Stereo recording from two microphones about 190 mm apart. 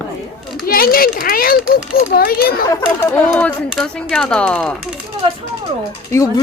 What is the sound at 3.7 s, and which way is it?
A child's voice, centre (ahead or behind).